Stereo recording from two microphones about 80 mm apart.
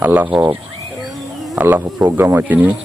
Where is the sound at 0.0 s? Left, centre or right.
Right.